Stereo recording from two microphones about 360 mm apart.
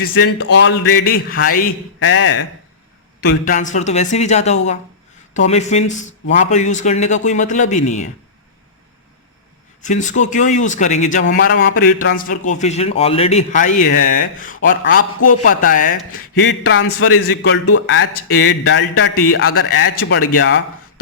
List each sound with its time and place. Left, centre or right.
0.0 s a man's voice: left
3.2 s a man's voice: left
9.8 s a man's voice: left
20.0 s a man's voice: left